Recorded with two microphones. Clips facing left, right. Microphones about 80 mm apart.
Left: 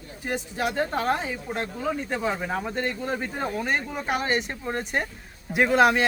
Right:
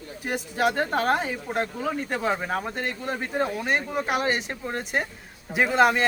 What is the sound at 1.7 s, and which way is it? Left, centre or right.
Speech, centre.